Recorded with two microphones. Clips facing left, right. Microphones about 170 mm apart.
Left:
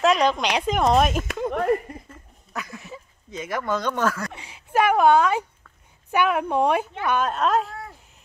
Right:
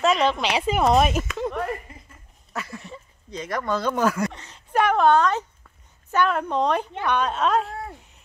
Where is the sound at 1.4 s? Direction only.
50° left (ahead or behind).